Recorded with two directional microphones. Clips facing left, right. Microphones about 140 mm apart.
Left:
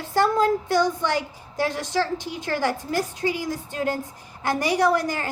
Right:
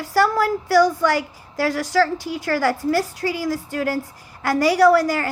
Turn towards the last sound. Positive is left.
turn(degrees=20)  # may be behind; listen again after turning